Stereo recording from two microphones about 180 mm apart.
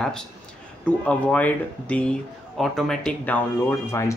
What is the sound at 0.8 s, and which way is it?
Speech, 5° left (ahead or behind).